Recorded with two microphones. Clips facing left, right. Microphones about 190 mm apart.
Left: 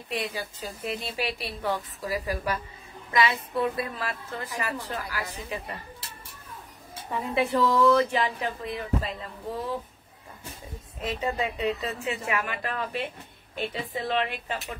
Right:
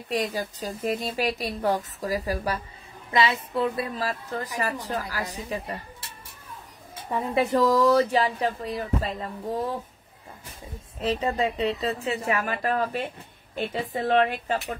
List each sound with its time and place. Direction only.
0.1 s speech: 40° right (ahead or behind)
7.3 s speech: 40° right (ahead or behind)
11.0 s a woman's voice: 35° right (ahead or behind)